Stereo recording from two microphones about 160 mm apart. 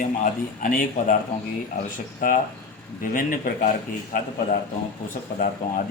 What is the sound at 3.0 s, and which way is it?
Speech, 60° left (ahead or behind).